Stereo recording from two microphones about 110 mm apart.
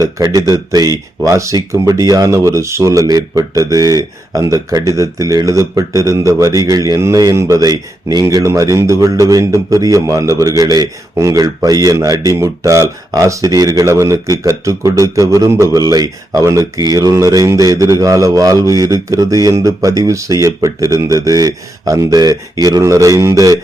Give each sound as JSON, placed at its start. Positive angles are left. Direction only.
{"t": 0.2, "sound": "speech", "side_deg": -30}